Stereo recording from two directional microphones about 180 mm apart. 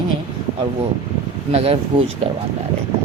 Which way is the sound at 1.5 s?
35° right (ahead or behind).